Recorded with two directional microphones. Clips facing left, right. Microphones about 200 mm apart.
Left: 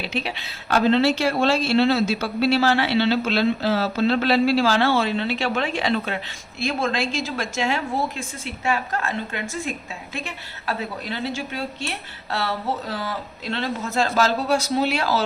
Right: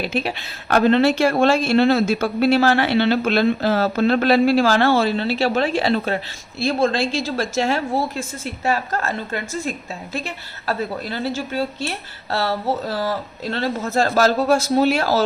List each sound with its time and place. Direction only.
0.0 s speech: 45° right (ahead or behind)